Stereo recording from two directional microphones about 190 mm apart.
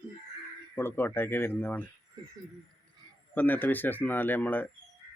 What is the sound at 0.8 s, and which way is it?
Speech, 10° left (ahead or behind).